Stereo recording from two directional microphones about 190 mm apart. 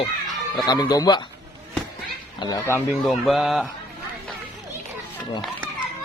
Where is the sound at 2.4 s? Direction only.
20° left (ahead or behind).